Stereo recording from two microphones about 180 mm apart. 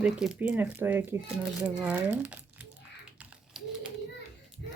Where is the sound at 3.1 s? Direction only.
5° right (ahead or behind).